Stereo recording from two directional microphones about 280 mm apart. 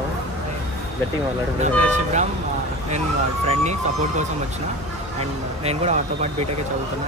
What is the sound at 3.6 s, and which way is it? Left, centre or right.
Speech, right.